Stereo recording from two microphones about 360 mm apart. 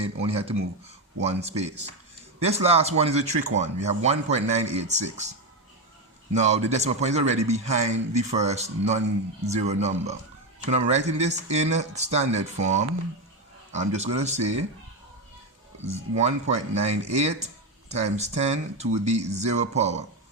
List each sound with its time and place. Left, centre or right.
0.0 s a man's voice: centre
6.3 s a man's voice: centre
15.9 s a man's voice: centre